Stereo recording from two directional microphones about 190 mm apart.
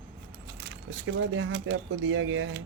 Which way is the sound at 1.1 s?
90° right.